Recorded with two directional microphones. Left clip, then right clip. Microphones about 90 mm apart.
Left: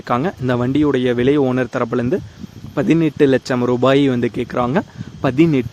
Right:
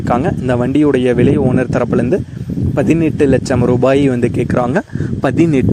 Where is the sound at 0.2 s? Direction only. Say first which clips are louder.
Right 4 dB; 20° right (ahead or behind).